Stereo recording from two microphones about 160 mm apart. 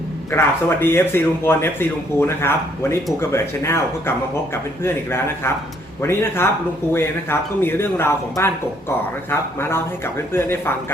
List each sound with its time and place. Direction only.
0.3 s speech: 15° left (ahead or behind)